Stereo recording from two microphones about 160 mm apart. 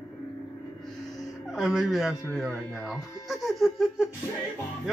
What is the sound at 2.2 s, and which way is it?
Speech, 5° left (ahead or behind).